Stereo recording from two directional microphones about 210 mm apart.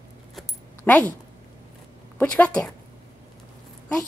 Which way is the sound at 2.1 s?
5° left (ahead or behind).